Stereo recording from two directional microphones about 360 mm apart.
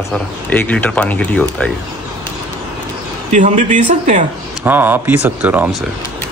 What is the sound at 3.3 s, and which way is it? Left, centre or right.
Speech, right.